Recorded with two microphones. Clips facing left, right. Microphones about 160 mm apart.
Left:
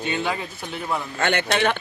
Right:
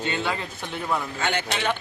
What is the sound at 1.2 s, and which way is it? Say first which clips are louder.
Speech: left 5 dB; 65° left (ahead or behind).